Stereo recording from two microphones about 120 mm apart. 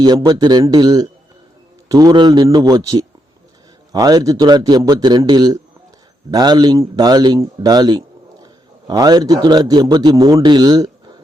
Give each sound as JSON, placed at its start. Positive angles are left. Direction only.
{"t": 0.0, "sound": "a man's voice", "side_deg": -35}